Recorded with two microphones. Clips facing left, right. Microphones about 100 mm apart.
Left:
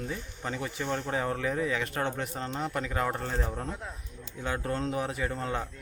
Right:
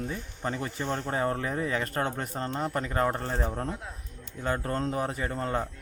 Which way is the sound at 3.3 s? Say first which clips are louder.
Right 2 dB; 30° right (ahead or behind).